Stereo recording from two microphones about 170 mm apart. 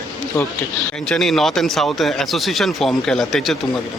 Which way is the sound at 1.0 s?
Centre (ahead or behind).